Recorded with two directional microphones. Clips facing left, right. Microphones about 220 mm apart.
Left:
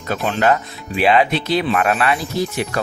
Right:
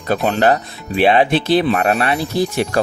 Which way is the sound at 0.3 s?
35° right (ahead or behind).